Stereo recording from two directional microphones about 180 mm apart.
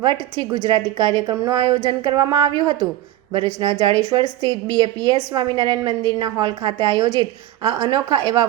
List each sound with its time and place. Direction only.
0.0 s a woman's voice: 25° right (ahead or behind)